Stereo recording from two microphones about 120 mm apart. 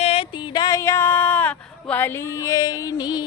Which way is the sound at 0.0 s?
50° left (ahead or behind).